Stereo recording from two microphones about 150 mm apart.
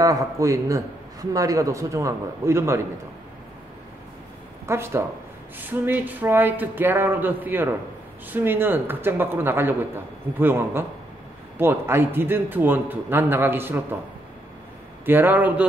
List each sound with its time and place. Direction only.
0.0 s a man's voice: 25° right (ahead or behind)
4.6 s a man's voice: 15° right (ahead or behind)
15.0 s a man's voice: 15° right (ahead or behind)